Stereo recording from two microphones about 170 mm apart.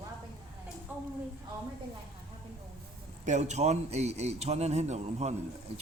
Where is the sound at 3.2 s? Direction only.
45° right (ahead or behind).